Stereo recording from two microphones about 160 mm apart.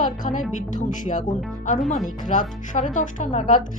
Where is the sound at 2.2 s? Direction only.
55° left (ahead or behind).